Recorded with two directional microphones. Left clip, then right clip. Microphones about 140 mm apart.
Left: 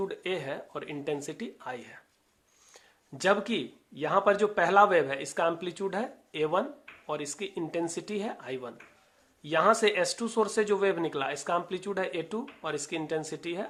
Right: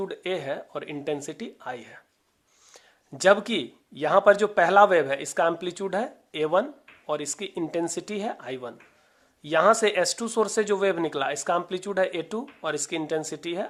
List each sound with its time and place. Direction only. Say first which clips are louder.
0.0 s speech: right 3 dB; 30° right (ahead or behind)